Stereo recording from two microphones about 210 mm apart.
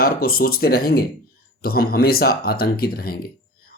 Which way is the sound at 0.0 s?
45° left (ahead or behind).